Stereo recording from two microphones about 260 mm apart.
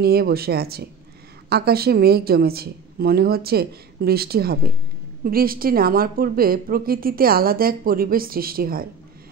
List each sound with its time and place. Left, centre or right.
0.0 s a woman's voice: right